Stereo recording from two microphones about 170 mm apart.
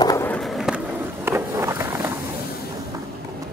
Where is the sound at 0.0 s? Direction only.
20° left (ahead or behind).